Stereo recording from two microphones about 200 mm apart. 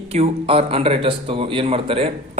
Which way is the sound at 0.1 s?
30° right (ahead or behind).